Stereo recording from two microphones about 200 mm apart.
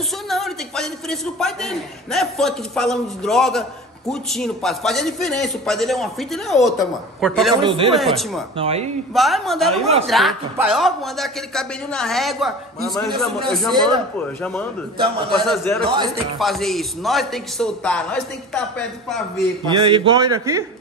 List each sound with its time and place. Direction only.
0.3 s a man's voice: centre (ahead or behind)
7.6 s a man's voice: 25° right (ahead or behind)
7.9 s a man's voice: centre (ahead or behind)
8.5 s a man's voice: 30° right (ahead or behind)
9.1 s a man's voice: centre (ahead or behind)
19.7 s a man's voice: 25° right (ahead or behind)